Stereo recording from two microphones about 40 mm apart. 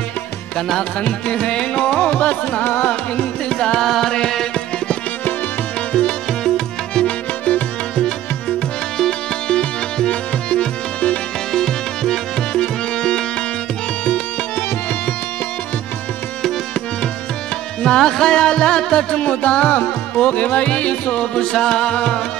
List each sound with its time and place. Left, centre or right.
0.7 s music: left
2.0 s music: left
3.4 s music: centre
3.8 s music: centre
5.9 s music: left
9.5 s music: left
11.5 s music: centre
17.8 s music: centre; by 21.2 s left
21.2 s music: left